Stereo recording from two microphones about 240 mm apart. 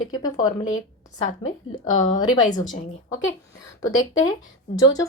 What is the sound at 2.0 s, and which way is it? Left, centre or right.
Speech, centre.